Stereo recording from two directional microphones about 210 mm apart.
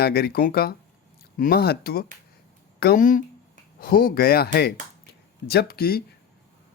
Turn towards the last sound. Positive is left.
turn(degrees=45)  # may be behind; listen again after turning